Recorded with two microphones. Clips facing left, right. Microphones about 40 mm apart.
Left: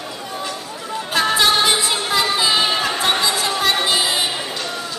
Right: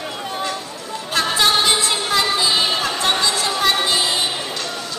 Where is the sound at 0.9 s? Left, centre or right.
Centre.